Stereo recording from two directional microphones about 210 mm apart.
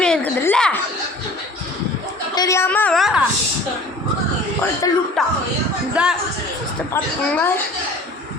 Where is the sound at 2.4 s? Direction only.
15° left (ahead or behind).